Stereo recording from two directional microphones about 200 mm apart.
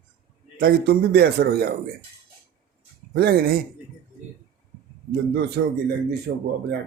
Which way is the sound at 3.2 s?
50° right (ahead or behind).